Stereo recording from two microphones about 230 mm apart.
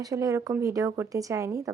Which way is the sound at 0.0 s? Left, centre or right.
Centre.